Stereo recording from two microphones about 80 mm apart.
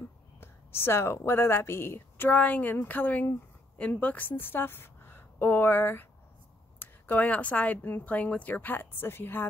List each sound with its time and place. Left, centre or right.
0.4 s speech: left